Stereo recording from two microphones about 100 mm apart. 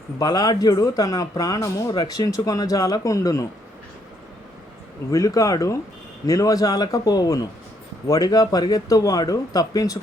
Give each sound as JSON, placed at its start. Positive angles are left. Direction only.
{"t": 0.2, "sound": "speech", "side_deg": 40}
{"t": 5.1, "sound": "speech", "side_deg": 35}